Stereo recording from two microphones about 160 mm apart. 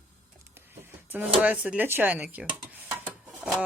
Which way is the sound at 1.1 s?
10° right (ahead or behind).